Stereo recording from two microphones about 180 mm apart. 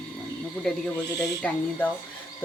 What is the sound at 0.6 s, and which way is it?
Speech, centre (ahead or behind).